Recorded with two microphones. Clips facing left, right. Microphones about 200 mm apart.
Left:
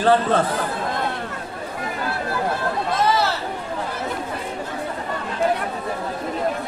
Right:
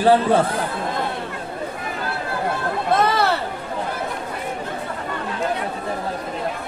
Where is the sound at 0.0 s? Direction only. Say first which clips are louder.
Right 2 dB; 10° right (ahead or behind).